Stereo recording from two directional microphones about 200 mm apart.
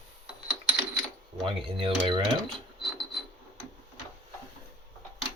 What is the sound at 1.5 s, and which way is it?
Speech, 25° right (ahead or behind).